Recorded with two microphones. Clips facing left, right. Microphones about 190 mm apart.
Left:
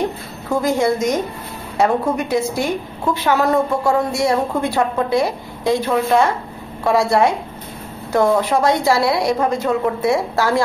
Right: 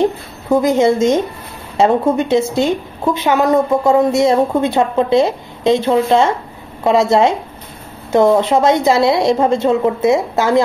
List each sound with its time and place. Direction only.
0.0 s a woman's voice: 20° right (ahead or behind)